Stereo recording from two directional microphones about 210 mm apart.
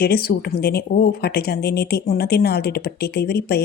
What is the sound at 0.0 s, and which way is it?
Speech, 50° left (ahead or behind).